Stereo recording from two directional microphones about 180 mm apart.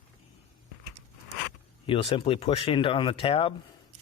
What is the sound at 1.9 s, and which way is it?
Speech, 30° left (ahead or behind).